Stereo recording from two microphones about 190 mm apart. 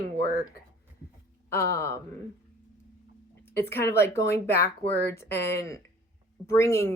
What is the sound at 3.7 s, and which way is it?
Speech, 15° left (ahead or behind).